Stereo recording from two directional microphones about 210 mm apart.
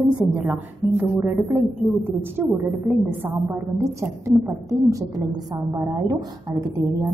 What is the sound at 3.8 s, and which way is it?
A woman's voice, 15° right (ahead or behind).